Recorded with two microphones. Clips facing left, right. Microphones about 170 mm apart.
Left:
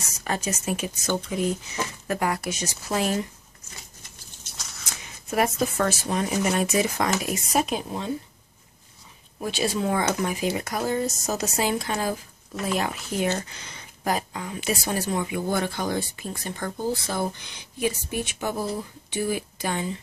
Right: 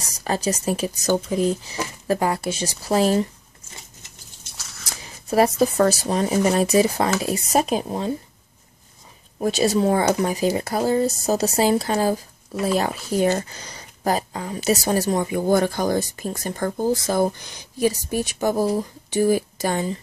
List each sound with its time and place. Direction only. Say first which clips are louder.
0.0 s speech: right 5 dB; 35° right (ahead or behind)
5.0 s speech: right 6 dB; 35° right (ahead or behind)
9.4 s speech: right 7 dB; 40° right (ahead or behind)